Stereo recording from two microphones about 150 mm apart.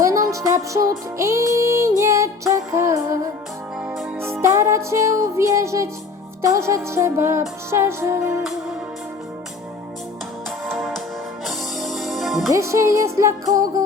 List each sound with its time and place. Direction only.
0.0 s music: 20° right (ahead or behind)
4.2 s music: 15° right (ahead or behind)
10.7 s music: centre (ahead or behind)
12.5 s music: 20° right (ahead or behind)